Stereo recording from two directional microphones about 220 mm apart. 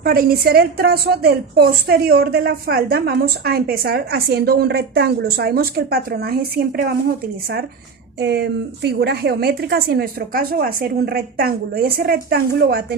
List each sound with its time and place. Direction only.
0.0 s a woman's voice: 40° right (ahead or behind)
8.2 s a woman's voice: 50° right (ahead or behind)